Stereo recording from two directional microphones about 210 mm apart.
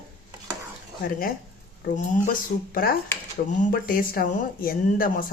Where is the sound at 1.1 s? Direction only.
45° left (ahead or behind).